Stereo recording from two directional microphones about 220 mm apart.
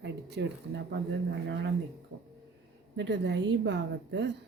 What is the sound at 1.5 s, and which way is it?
Speech, 50° right (ahead or behind).